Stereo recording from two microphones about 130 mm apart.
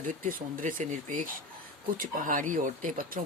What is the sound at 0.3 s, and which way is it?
Speech, 90° right.